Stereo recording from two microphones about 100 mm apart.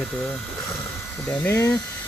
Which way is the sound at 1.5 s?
30° left (ahead or behind).